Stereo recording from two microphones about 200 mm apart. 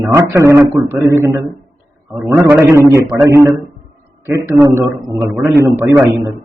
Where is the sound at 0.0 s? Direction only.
15° right (ahead or behind).